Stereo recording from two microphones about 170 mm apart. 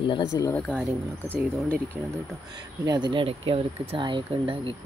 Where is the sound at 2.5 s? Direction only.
25° right (ahead or behind).